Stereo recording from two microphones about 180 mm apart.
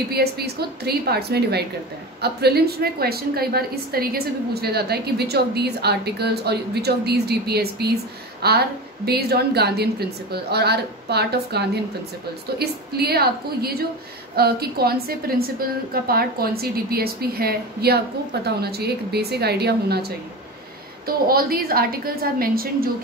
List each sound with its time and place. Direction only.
0.1 s a woman's voice: 60° right (ahead or behind)